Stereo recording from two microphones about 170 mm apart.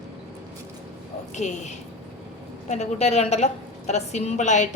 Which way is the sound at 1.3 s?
45° left (ahead or behind).